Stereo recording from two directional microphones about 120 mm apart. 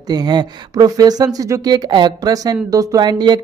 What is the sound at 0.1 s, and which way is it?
Speech, 35° right (ahead or behind).